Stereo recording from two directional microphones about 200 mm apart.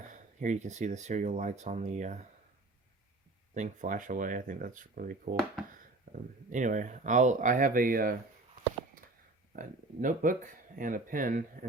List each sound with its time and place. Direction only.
0.1 s speech: 40° right (ahead or behind)
3.5 s speech: 40° right (ahead or behind)
6.1 s a sound: 40° right (ahead or behind)
6.5 s speech: 40° right (ahead or behind)
9.5 s speech: 40° right (ahead or behind)